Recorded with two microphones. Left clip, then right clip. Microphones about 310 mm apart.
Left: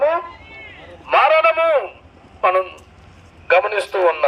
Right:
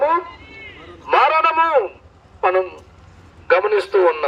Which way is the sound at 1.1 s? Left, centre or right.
Centre.